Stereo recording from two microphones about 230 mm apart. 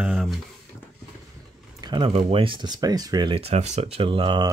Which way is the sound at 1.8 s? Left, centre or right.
Centre.